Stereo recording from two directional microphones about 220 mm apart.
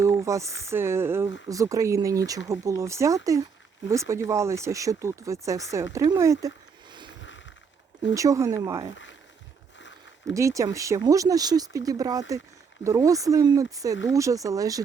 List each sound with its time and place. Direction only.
0.0 s speech: 15° right (ahead or behind)
8.0 s speech: 15° right (ahead or behind)
8.9 s speech: 55° left (ahead or behind)
10.2 s speech: 15° right (ahead or behind)